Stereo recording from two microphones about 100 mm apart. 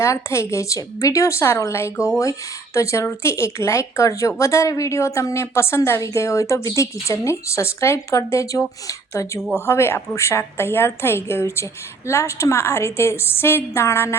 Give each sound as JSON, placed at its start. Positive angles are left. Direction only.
{"t": 0.0, "sound": "speech", "side_deg": 30}